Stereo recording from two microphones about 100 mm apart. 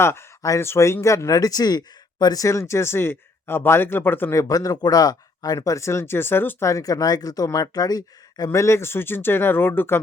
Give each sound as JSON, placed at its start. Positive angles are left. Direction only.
{"t": 0.0, "sound": "speech", "side_deg": 25}
{"t": 4.4, "sound": "speech", "side_deg": 35}
{"t": 6.7, "sound": "speech", "side_deg": 35}